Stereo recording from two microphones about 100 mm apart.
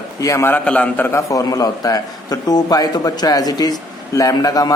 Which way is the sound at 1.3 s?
35° left (ahead or behind).